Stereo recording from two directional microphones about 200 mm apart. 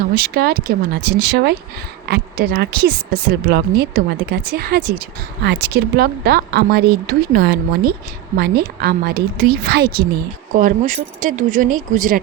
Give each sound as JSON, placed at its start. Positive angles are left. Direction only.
{"t": 0.1, "sound": "speech", "side_deg": -50}
{"t": 10.5, "sound": "speech", "side_deg": -40}